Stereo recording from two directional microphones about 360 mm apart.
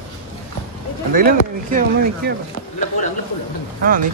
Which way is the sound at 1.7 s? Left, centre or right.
Right.